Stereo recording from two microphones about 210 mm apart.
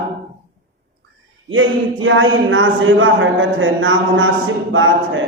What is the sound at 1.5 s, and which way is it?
Speech, 65° right (ahead or behind).